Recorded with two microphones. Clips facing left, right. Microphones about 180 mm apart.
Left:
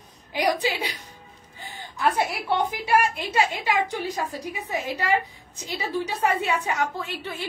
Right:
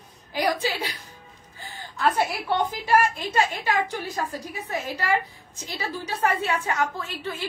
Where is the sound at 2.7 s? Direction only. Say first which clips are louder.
Right 1 dB; 15° left (ahead or behind).